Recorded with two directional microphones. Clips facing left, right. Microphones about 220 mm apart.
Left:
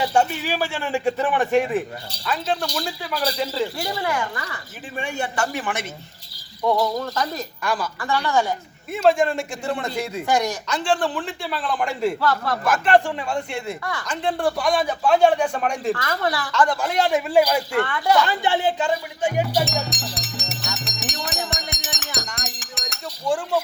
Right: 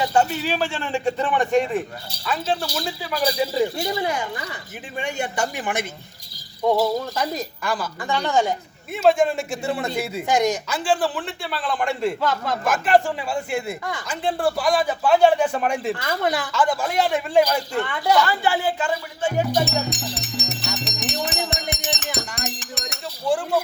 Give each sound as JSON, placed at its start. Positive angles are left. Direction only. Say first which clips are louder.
{"t": 0.1, "sound": "a man's voice", "louder": "even", "side_deg": 15}
{"t": 7.1, "sound": "a man's voice", "louder": "right 1 dB", "side_deg": -10}
{"t": 8.9, "sound": "a man's voice", "louder": "even", "side_deg": 0}
{"t": 10.2, "sound": "speech", "louder": "right 3 dB", "side_deg": -20}
{"t": 10.7, "sound": "a man's voice", "louder": "even", "side_deg": -5}
{"t": 12.2, "sound": "speech", "louder": "left 1 dB", "side_deg": -20}
{"t": 12.6, "sound": "a man's voice", "louder": "even", "side_deg": -5}
{"t": 16.5, "sound": "a man's voice", "louder": "left 1 dB", "side_deg": -5}
{"t": 17.8, "sound": "a man's voice", "louder": "even", "side_deg": -15}
{"t": 18.3, "sound": "speech", "louder": "left 1 dB", "side_deg": 20}
{"t": 19.6, "sound": "music", "louder": "right 2 dB", "side_deg": 0}
{"t": 22.1, "sound": "chink", "louder": "right 3 dB", "side_deg": -5}